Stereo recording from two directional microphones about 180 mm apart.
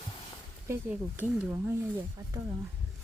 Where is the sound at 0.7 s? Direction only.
10° right (ahead or behind).